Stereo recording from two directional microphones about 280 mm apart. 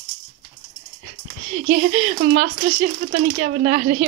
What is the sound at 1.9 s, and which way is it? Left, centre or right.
Speech, right.